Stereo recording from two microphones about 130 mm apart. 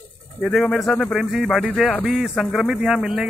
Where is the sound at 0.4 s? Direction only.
5° left (ahead or behind).